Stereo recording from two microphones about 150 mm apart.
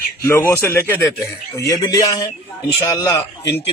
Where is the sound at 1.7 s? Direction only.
25° left (ahead or behind).